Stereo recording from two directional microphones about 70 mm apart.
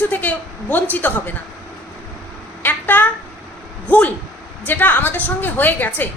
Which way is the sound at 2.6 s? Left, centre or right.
Left.